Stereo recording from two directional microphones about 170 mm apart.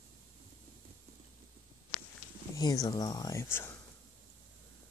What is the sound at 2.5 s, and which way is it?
Speech, 20° left (ahead or behind).